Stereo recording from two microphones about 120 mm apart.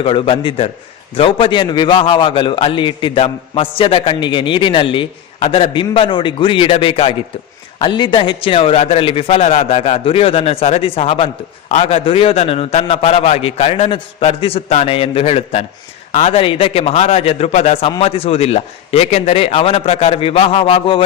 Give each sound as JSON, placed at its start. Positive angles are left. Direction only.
{"t": 0.0, "sound": "a man's voice", "side_deg": 50}
{"t": 7.8, "sound": "a man's voice", "side_deg": 40}
{"t": 9.5, "sound": "a man's voice", "side_deg": 85}